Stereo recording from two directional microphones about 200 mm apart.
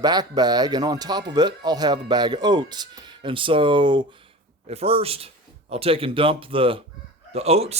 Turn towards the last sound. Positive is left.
turn(degrees=-30)  # may be behind; listen again after turning